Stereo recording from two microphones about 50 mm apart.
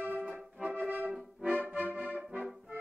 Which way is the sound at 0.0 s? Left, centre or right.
Right.